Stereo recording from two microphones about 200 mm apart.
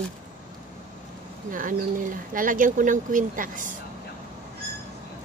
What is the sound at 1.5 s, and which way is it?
Speech, 40° right (ahead or behind).